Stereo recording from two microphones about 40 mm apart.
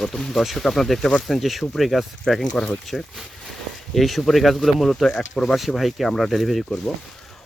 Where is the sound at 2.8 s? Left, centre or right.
Centre.